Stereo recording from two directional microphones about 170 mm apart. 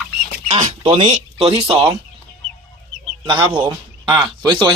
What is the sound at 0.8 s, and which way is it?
Speech, 30° right (ahead or behind).